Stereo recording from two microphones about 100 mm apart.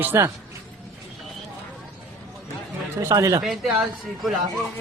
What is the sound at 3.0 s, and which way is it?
Speech, 30° right (ahead or behind).